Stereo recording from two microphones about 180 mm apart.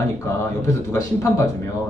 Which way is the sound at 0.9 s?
15° left (ahead or behind).